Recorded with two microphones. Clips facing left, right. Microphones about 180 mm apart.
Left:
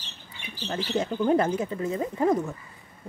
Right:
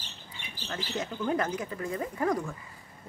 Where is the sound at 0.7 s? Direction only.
30° left (ahead or behind).